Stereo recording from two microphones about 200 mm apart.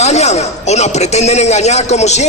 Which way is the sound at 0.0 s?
35° left (ahead or behind).